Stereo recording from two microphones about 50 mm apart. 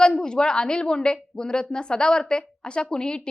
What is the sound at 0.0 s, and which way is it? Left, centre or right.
A woman's voice, centre.